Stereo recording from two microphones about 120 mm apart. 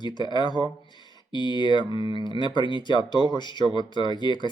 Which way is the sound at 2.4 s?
40° left (ahead or behind).